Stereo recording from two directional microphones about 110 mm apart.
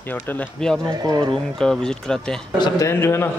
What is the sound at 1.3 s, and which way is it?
A man's voice, 5° left (ahead or behind).